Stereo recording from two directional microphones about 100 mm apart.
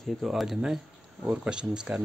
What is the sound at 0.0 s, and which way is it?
Speech, centre (ahead or behind).